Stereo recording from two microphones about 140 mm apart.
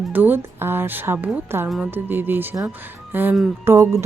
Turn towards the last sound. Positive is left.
turn(degrees=-20)  # may be behind; listen again after turning